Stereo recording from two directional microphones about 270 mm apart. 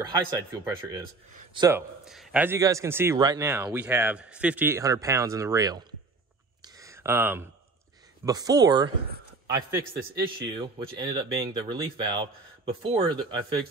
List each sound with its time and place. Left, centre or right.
0.0 s a man's voice: centre
1.3 s speech: right
2.0 s a man's voice: centre
6.6 s a sound: centre
8.3 s a man's voice: centre